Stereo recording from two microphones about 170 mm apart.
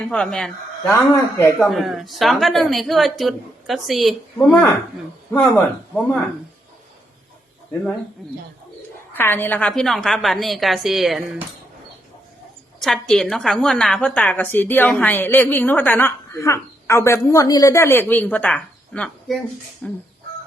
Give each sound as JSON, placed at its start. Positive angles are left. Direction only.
{"t": 0.1, "sound": "a woman's voice", "side_deg": 5}
{"t": 0.9, "sound": "a woman's voice", "side_deg": 15}
{"t": 1.5, "sound": "a woman's voice", "side_deg": 0}
{"t": 8.2, "sound": "a woman's voice", "side_deg": 0}
{"t": 9.1, "sound": "a woman's voice", "side_deg": 10}
{"t": 12.8, "sound": "a woman's voice", "side_deg": 5}